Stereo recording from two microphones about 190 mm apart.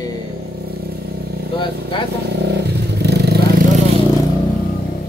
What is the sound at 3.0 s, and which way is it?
Vehicle, 60° right (ahead or behind).